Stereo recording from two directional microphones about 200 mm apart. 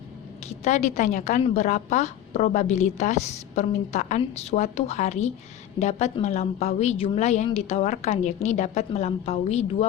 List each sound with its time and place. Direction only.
0.4 s a woman's voice: 35° left (ahead or behind)